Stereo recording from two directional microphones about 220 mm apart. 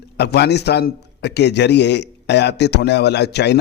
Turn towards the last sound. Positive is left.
turn(degrees=50)  # may be behind; listen again after turning